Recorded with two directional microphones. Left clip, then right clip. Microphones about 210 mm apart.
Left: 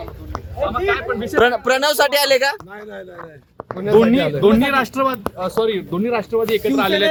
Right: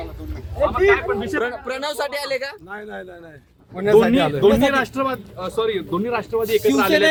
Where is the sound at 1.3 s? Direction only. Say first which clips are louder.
Left 9 dB; 40° left (ahead or behind).